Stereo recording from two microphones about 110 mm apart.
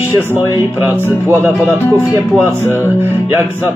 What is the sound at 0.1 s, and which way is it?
Music, 20° right (ahead or behind).